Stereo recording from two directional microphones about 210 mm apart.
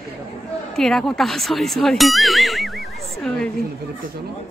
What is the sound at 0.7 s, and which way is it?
A woman's voice, centre (ahead or behind).